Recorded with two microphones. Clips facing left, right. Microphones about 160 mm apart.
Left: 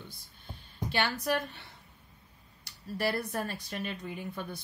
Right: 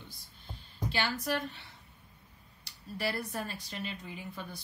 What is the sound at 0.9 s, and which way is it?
A woman's voice, 55° left (ahead or behind).